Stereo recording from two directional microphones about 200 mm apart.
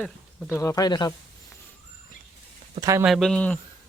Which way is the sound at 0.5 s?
15° left (ahead or behind).